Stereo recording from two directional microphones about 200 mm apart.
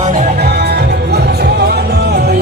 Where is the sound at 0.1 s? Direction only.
35° right (ahead or behind).